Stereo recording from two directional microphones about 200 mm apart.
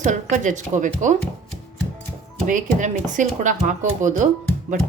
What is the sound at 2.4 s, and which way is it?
Speech, 40° right (ahead or behind).